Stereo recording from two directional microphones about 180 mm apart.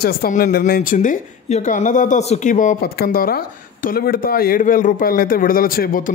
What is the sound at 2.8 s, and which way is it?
Speech, 60° left (ahead or behind).